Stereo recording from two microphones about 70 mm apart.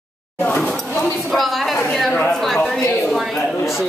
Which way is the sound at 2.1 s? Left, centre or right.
Left.